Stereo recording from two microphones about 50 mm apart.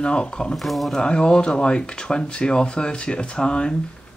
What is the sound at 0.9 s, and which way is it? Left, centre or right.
Speech, centre.